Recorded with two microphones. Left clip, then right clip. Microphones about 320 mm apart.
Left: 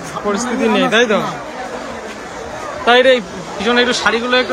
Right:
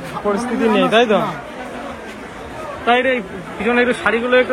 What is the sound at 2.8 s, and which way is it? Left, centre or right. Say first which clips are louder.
Speech: left 5 dB; centre.